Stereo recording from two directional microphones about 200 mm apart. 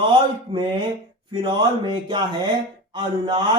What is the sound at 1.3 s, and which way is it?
Speech, 25° right (ahead or behind).